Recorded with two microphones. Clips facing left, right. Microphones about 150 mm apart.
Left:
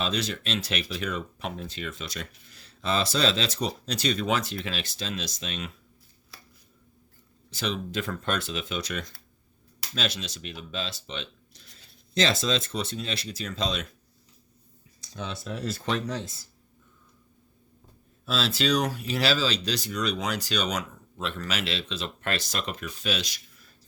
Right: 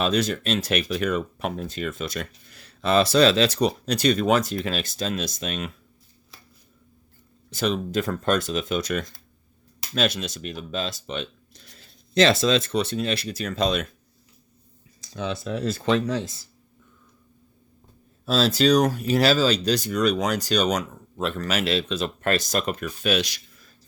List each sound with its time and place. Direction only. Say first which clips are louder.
0.0 s speech: right 7 dB; 50° right (ahead or behind)
7.5 s speech: right 6 dB; 45° right (ahead or behind)
12.1 s speech: right 7 dB; 65° right (ahead or behind)
15.0 s computer keyboard: right 6 dB; 90° right
15.9 s speech: right 8 dB; 90° right
18.3 s speech: right 7 dB; 40° right (ahead or behind); by 23.4 s 65° right (ahead or behind)